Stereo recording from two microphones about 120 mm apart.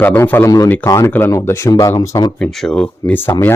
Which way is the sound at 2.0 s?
35° left (ahead or behind).